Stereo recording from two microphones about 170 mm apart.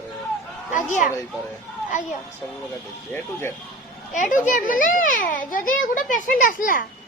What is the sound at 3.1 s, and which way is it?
Speech, 15° left (ahead or behind).